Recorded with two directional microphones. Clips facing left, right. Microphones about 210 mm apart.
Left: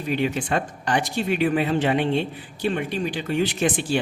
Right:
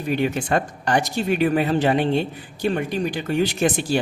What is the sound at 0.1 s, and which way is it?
Speech, 45° right (ahead or behind).